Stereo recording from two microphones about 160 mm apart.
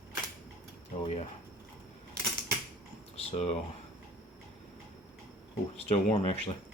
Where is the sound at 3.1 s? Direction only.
40° left (ahead or behind).